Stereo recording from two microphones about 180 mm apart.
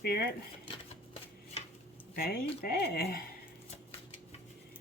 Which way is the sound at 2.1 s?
55° left (ahead or behind).